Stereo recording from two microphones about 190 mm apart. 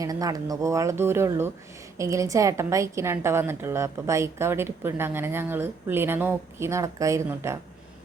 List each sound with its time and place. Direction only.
0.0 s a woman's voice: 20° right (ahead or behind)